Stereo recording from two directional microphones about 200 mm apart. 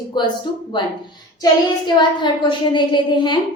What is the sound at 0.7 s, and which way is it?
Speech, 25° left (ahead or behind).